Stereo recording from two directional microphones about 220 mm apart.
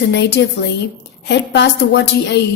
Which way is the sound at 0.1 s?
50° left (ahead or behind).